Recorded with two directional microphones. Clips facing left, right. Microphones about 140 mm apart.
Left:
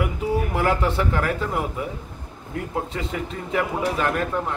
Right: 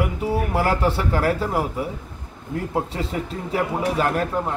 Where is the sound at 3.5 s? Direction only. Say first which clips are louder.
Right 1 dB; 35° right (ahead or behind).